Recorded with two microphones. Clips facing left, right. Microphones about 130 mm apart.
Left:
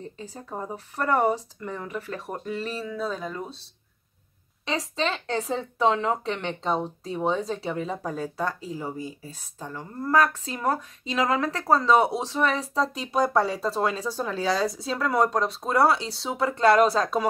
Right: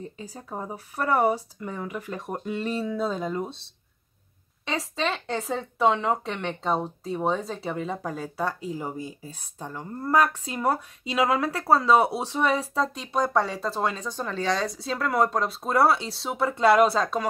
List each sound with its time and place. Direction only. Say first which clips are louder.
0.0 s speech: even; 10° right (ahead or behind)
4.6 s speech: left 1 dB; centre (ahead or behind)